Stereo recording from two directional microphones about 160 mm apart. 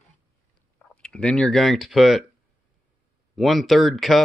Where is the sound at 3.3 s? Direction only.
Centre (ahead or behind).